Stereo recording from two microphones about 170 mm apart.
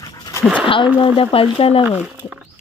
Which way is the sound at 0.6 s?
30° left (ahead or behind).